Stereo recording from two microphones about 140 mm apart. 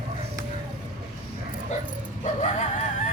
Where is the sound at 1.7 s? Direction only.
55° left (ahead or behind).